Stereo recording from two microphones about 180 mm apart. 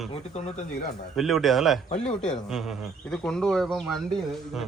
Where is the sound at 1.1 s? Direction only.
Centre (ahead or behind).